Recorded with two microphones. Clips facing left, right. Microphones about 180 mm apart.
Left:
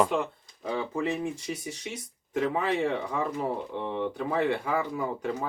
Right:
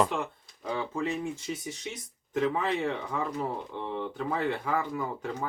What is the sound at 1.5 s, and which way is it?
Speech, 5° left (ahead or behind).